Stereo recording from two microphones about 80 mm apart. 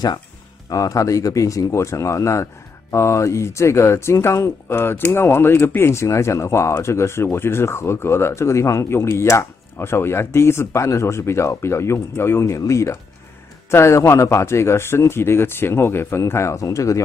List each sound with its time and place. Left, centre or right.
0.7 s speech: left